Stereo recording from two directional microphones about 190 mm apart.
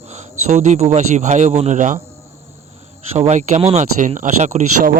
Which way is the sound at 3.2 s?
40° right (ahead or behind).